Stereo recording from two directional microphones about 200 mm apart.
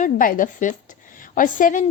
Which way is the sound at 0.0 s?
40° left (ahead or behind).